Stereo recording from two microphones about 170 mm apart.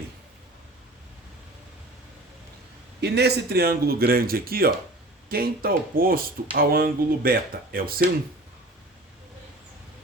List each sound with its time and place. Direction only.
3.0 s speech: 75° right (ahead or behind)